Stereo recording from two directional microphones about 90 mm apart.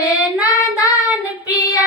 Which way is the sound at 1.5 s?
40° left (ahead or behind).